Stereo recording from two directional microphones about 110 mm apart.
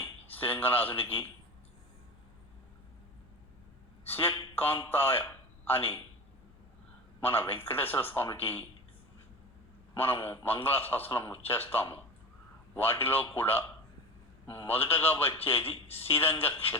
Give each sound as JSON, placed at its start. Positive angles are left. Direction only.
{"t": 0.0, "sound": "a sound", "side_deg": 20}
{"t": 1.0, "sound": "a man's voice", "side_deg": 20}
{"t": 4.1, "sound": "speech", "side_deg": 20}
{"t": 7.3, "sound": "a man's voice", "side_deg": 20}
{"t": 10.2, "sound": "a man's voice", "side_deg": 20}